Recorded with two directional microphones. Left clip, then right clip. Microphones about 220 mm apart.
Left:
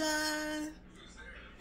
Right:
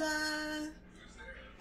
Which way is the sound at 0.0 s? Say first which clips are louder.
Left 1 dB; 45° left (ahead or behind).